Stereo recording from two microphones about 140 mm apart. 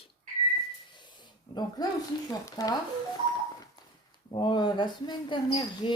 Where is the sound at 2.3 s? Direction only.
25° left (ahead or behind).